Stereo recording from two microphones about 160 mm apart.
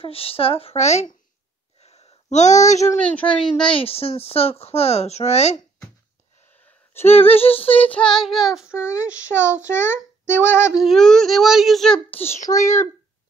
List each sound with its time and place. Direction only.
0.0 s speech: 35° left (ahead or behind)
1.8 s a sound: 40° left (ahead or behind)
2.3 s speech: 45° left (ahead or behind)
3.0 s a child's voice: 5° left (ahead or behind)
3.6 s speech: 35° left (ahead or behind)
7.1 s speech: 35° left (ahead or behind)
7.8 s a child's voice: 5° left (ahead or behind)
8.7 s a child's voice: 15° left (ahead or behind)
9.0 s child singing: 10° right (ahead or behind)
9.7 s a child's voice: 15° left (ahead or behind)
10.7 s a child's voice: centre (ahead or behind); by 12.8 s 20° left (ahead or behind)